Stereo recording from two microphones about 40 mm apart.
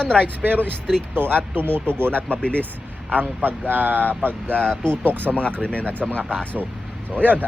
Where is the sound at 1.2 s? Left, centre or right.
Right.